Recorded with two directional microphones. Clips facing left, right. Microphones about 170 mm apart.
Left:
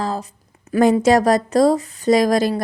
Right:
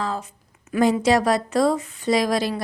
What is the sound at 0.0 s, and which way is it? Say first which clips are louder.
Speech: left 3 dB; 35° left (ahead or behind).